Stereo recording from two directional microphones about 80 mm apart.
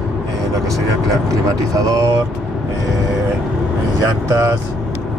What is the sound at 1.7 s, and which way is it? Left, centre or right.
Speech, right.